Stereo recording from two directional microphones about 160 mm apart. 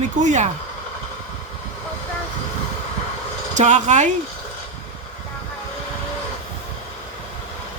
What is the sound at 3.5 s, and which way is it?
Speech, 45° right (ahead or behind).